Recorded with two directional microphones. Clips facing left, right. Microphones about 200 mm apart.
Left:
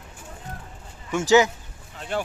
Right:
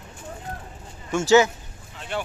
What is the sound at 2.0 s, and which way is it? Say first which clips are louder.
Vehicle: left 2 dB; 40° left (ahead or behind).